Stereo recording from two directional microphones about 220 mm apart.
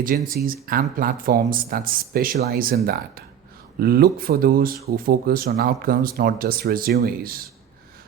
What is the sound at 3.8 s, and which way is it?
Speech, 45° right (ahead or behind).